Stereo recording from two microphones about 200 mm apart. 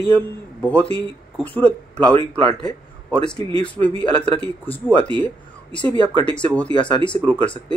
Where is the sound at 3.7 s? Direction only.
5° left (ahead or behind).